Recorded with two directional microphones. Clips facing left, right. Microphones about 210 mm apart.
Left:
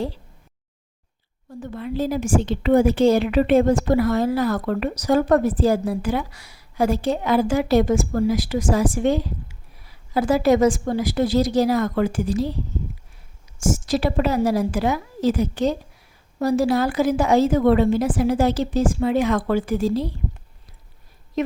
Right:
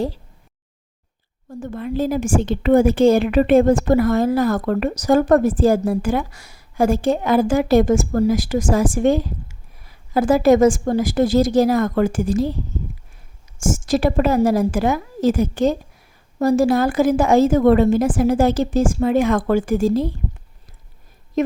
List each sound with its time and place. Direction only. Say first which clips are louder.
1.5 s a woman's voice: right 3 dB; 50° right (ahead or behind)
13.6 s a woman's voice: right 3 dB; 50° right (ahead or behind)
21.4 s a woman's voice: right 4 dB; 45° right (ahead or behind)